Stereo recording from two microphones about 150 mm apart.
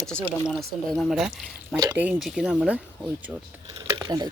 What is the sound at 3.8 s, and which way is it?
Speech, 25° right (ahead or behind).